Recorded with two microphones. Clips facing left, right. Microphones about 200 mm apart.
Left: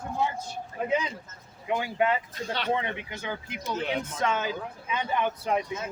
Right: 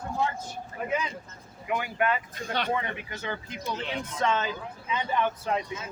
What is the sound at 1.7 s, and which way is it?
Speech, 25° left (ahead or behind).